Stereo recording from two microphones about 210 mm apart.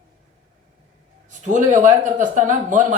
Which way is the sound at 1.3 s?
35° right (ahead or behind).